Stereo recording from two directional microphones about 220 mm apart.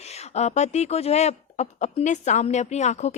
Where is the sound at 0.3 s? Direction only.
30° left (ahead or behind).